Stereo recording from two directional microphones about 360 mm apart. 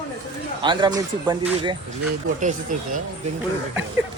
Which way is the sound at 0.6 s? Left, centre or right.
Centre.